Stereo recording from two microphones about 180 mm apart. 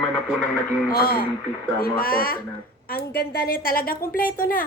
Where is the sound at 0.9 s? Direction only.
55° left (ahead or behind).